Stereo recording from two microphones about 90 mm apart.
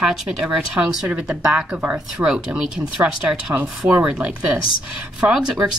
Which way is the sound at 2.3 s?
5° right (ahead or behind).